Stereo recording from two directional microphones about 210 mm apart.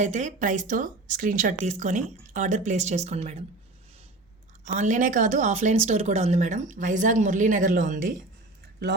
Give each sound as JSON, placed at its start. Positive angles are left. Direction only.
{"t": 0.0, "sound": "speech", "side_deg": -35}
{"t": 4.6, "sound": "speech", "side_deg": -35}